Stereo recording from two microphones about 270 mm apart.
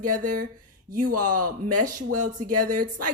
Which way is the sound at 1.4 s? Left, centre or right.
Right.